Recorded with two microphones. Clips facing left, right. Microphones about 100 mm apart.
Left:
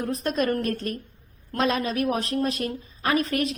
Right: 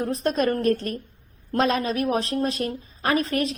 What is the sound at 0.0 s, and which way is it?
A woman's voice, 35° right (ahead or behind).